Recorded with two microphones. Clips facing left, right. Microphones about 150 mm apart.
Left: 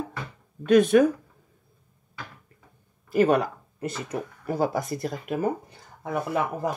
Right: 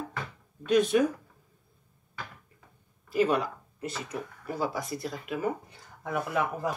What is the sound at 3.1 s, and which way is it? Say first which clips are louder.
Speech: left 5 dB; 50° left (ahead or behind).